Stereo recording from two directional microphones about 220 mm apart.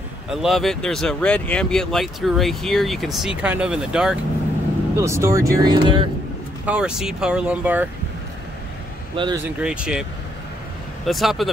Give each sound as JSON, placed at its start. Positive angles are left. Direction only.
{"t": 0.3, "sound": "speech", "side_deg": 0}
{"t": 6.6, "sound": "speech", "side_deg": -5}
{"t": 9.1, "sound": "speech", "side_deg": -20}
{"t": 9.4, "sound": "speech", "side_deg": -5}
{"t": 11.1, "sound": "speech", "side_deg": 0}